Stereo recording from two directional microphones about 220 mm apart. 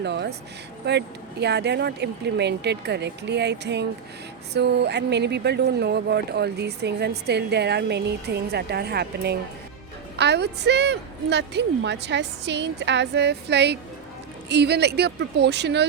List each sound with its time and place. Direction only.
0.0 s speech: 50° right (ahead or behind)